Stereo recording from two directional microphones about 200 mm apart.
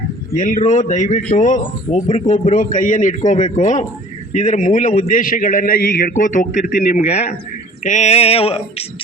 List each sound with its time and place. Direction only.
0.3 s speech: 35° left (ahead or behind)